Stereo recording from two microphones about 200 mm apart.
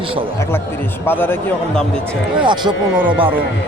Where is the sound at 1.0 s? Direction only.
10° left (ahead or behind).